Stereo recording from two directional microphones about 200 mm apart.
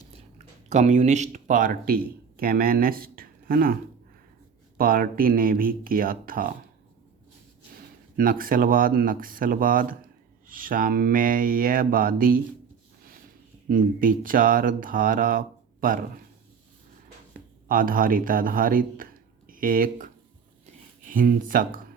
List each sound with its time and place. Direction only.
0.1 s speech: 35° right (ahead or behind)
4.8 s speech: 45° right (ahead or behind)
8.1 s speech: 45° right (ahead or behind)
13.7 s speech: 45° right (ahead or behind)
17.7 s speech: 45° right (ahead or behind)
21.1 s speech: 45° right (ahead or behind)